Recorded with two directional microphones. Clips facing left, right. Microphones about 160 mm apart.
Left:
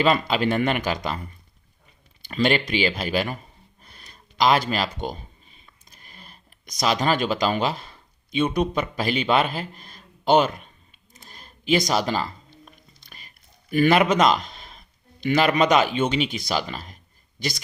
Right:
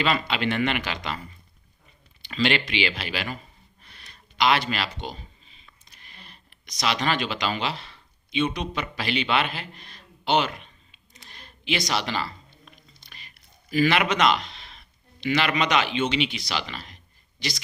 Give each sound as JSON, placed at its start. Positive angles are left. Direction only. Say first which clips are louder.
{"t": 0.0, "sound": "speech", "louder": "left 5 dB", "side_deg": 40}
{"t": 2.2, "sound": "speech", "louder": "left 3 dB", "side_deg": 45}
{"t": 13.7, "sound": "speech", "louder": "left 4 dB", "side_deg": 50}